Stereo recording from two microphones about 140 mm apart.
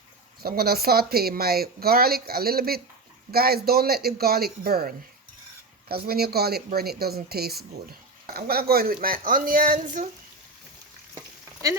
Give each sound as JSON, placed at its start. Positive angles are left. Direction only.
{"t": 0.4, "sound": "speech", "side_deg": -90}